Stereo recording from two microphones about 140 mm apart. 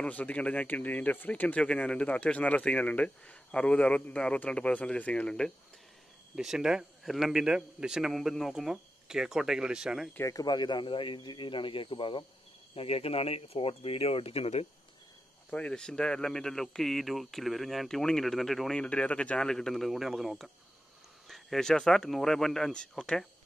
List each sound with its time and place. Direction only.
0.0 s speech: 10° left (ahead or behind)
6.3 s speech: 5° right (ahead or behind)
10.1 s speech: 25° left (ahead or behind); by 14.7 s 45° left (ahead or behind)
15.5 s speech: 5° left (ahead or behind)